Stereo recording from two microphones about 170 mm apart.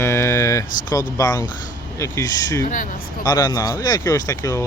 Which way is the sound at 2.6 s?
50° left (ahead or behind).